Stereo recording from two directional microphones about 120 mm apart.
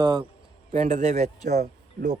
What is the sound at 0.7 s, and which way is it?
Speech, 65° right (ahead or behind).